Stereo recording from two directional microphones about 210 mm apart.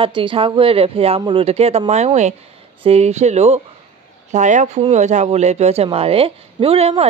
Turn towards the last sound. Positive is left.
turn(degrees=-30)  # may be behind; listen again after turning